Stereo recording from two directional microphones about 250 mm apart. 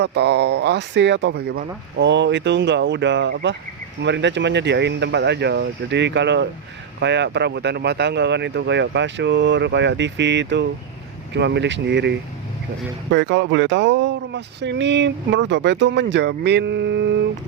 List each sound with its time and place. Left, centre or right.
0.0 s speech: right